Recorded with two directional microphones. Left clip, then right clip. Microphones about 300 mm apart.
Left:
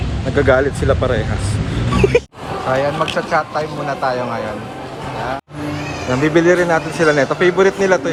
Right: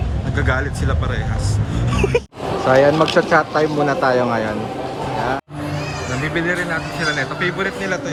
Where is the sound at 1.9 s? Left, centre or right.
Centre.